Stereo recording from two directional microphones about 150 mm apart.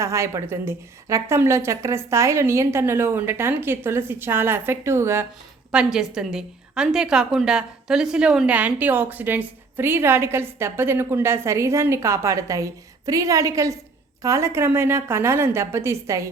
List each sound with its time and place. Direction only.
0.0 s a woman's voice: 20° right (ahead or behind)
5.7 s a woman's voice: 5° right (ahead or behind); by 16.3 s 20° right (ahead or behind)